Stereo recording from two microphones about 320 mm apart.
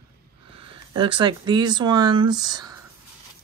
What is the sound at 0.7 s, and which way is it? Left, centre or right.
Speech, centre.